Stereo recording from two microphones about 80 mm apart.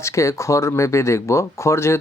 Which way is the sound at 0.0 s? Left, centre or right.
Left.